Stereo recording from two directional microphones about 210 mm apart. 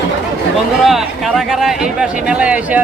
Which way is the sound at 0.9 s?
Centre (ahead or behind).